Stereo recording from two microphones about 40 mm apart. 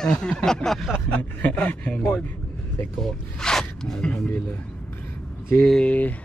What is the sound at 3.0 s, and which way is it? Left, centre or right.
Speech, centre.